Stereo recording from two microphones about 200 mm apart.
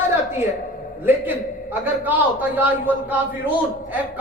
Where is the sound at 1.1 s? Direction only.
10° right (ahead or behind).